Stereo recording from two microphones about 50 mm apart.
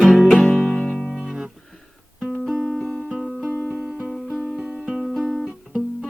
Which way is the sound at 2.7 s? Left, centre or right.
Centre.